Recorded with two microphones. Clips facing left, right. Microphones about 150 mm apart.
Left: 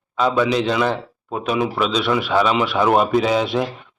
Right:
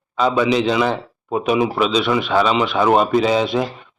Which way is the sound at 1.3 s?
15° right (ahead or behind).